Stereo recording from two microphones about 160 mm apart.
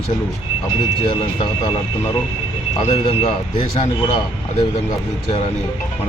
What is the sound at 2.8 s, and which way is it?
Speech, 30° left (ahead or behind).